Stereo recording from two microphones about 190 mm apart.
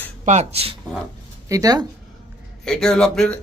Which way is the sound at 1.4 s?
20° right (ahead or behind).